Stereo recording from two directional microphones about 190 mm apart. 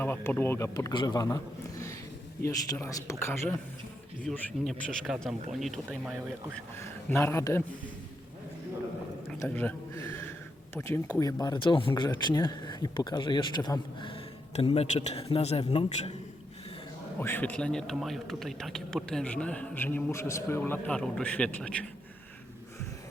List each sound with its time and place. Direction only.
0.0 s a man's voice: 10° left (ahead or behind)
2.4 s a man's voice: 15° left (ahead or behind)
4.2 s speech: centre (ahead or behind)
6.7 s a man's voice: 15° left (ahead or behind)
9.4 s a man's voice: 10° left (ahead or behind); by 16.1 s 30° left (ahead or behind)
17.2 s a man's voice: 10° left (ahead or behind)